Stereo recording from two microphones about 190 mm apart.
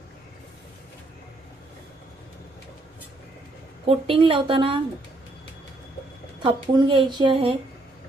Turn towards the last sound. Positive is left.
turn(degrees=-25)  # may be behind; listen again after turning